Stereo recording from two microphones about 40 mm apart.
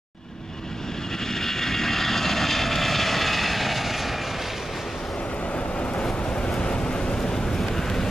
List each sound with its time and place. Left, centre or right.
1.3 s vehicle: centre
6.2 s vehicle: left
7.6 s boat: centre